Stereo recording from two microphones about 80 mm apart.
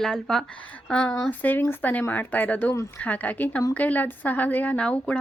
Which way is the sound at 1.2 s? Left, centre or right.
Left.